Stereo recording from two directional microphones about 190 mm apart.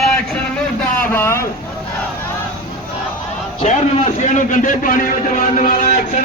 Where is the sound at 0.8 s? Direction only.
10° left (ahead or behind).